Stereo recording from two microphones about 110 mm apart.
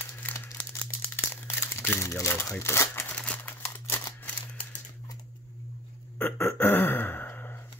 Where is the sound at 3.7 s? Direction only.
20° left (ahead or behind).